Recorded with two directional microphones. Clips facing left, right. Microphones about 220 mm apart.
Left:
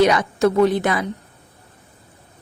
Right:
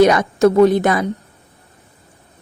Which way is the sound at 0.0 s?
45° right (ahead or behind).